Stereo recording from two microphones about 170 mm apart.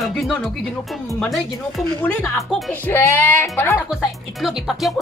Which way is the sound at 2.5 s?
Centre (ahead or behind).